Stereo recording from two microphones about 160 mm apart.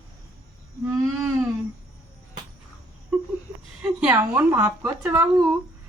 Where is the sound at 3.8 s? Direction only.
5° right (ahead or behind).